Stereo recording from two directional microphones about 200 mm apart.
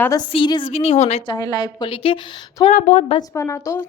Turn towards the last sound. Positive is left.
turn(degrees=15)  # may be behind; listen again after turning